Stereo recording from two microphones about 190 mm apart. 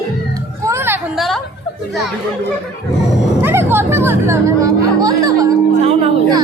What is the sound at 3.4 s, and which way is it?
Chatter, 10° right (ahead or behind).